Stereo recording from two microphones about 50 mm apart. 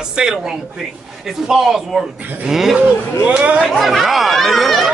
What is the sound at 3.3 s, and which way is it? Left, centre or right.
Speech, right.